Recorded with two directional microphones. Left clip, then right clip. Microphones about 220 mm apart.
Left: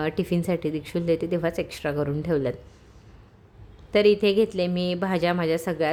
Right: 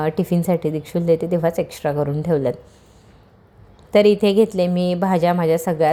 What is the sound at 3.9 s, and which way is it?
A woman's voice, 5° right (ahead or behind).